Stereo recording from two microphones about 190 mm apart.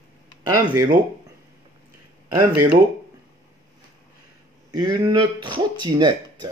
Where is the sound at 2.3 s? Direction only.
15° right (ahead or behind).